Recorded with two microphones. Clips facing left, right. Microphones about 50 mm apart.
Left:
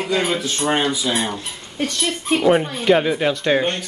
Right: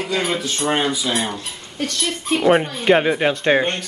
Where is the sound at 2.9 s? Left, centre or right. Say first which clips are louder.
Right 1 dB; right.